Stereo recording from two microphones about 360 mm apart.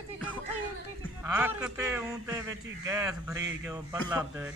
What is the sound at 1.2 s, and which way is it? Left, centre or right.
A man's voice, centre.